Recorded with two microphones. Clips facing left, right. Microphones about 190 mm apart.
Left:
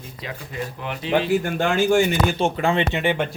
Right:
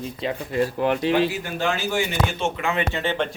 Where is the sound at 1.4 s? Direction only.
50° left (ahead or behind).